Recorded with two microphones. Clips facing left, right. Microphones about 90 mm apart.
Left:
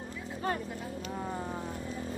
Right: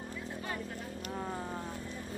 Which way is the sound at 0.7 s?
Centre (ahead or behind).